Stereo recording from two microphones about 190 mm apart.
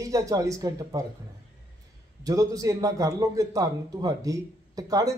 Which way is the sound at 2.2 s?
15° right (ahead or behind).